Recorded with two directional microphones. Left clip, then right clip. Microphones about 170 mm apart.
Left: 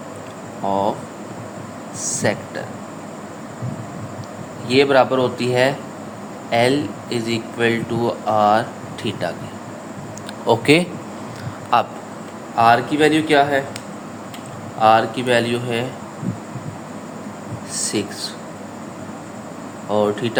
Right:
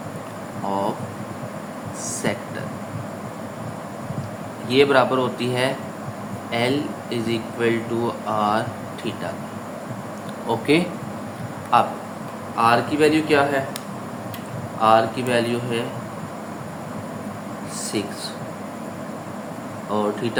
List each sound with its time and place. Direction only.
2.2 s speech: 40° left (ahead or behind)
4.7 s speech: 40° left (ahead or behind)
10.4 s speech: 65° left (ahead or behind)
12.5 s a man's voice: 45° left (ahead or behind)
14.8 s a man's voice: 45° left (ahead or behind)
17.8 s speech: 45° left (ahead or behind)
19.9 s a man's voice: 45° left (ahead or behind)